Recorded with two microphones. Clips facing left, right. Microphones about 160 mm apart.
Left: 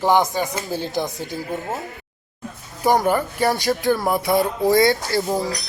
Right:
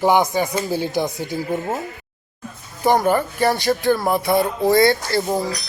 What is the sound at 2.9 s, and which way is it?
Speech, 15° left (ahead or behind).